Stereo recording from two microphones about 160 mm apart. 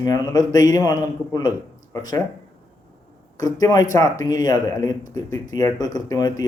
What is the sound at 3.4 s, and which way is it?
Speech, 25° left (ahead or behind).